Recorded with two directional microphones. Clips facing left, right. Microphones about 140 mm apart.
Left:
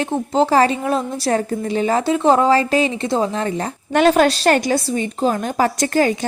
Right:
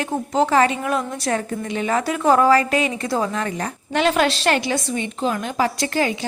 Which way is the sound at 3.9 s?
45° left (ahead or behind).